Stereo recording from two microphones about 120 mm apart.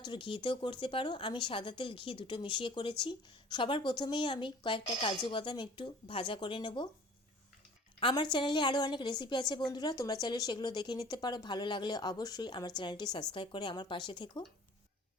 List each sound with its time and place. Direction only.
0.0 s a woman's voice: 45° left (ahead or behind)
8.1 s a woman's voice: 40° left (ahead or behind)